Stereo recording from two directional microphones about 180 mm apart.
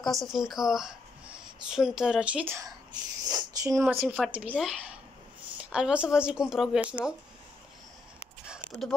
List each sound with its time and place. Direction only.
0.0 s speech: centre (ahead or behind); by 3.8 s 20° right (ahead or behind)
4.0 s speech: 5° right (ahead or behind)
8.5 s a sound: 5° left (ahead or behind)